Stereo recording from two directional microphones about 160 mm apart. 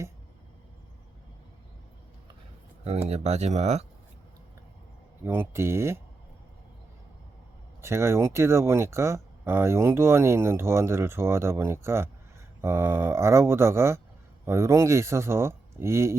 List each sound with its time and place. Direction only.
2.8 s speech: 40° right (ahead or behind)
5.2 s speech: 15° right (ahead or behind)
7.8 s speech: 15° right (ahead or behind)